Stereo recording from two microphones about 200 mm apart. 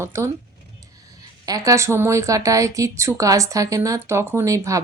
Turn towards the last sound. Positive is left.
turn(degrees=-15)  # may be behind; listen again after turning